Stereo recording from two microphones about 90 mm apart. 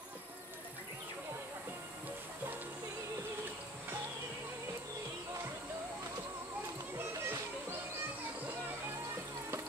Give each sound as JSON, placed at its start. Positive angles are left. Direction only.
{"t": 7.0, "sound": "music", "side_deg": -25}